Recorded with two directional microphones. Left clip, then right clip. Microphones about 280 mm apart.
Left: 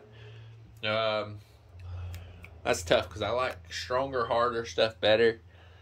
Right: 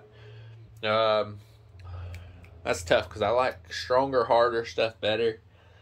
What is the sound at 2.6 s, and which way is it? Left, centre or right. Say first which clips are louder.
Speech: right 1 dB; centre.